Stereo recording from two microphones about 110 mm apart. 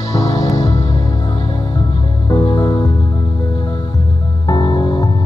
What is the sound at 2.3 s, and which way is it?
Music, 50° left (ahead or behind).